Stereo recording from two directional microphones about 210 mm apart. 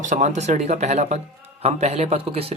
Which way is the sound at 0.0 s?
35° right (ahead or behind).